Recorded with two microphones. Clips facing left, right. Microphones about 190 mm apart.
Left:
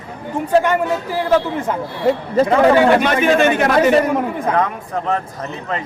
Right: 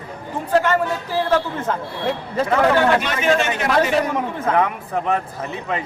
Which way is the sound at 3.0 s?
55° left (ahead or behind).